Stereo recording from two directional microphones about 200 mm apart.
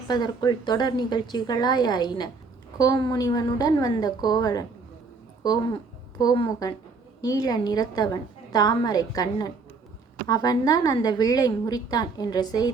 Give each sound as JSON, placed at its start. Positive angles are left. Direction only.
{"t": 0.1, "sound": "a woman's voice", "side_deg": 20}